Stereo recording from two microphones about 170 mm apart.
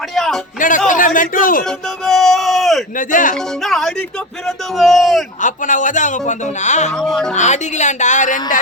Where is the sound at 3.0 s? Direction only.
50° left (ahead or behind).